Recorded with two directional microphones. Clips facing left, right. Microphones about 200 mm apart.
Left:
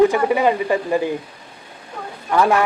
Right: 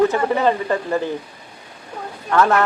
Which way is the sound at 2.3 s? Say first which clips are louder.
Even; 10° left (ahead or behind).